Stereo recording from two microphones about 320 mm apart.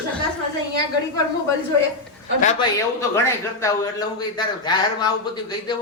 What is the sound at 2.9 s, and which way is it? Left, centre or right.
A man's voice, centre.